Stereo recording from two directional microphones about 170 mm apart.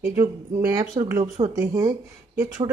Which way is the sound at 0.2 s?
20° right (ahead or behind).